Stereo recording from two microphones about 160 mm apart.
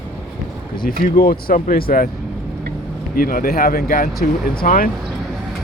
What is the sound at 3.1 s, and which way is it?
Speech, 65° left (ahead or behind).